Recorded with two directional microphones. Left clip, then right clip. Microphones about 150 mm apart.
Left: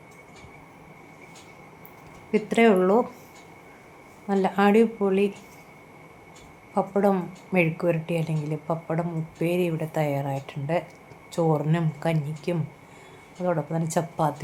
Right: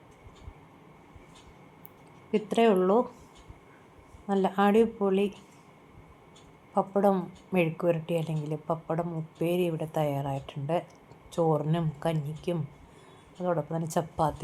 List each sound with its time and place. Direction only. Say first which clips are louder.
2.3 s a woman's voice: left 4 dB; 15° right (ahead or behind)
4.3 s a woman's voice: left 4 dB; 15° right (ahead or behind)
6.7 s a woman's voice: left 2 dB; 15° right (ahead or behind)